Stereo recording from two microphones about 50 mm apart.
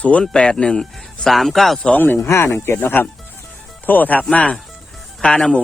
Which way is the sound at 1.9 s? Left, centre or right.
Left.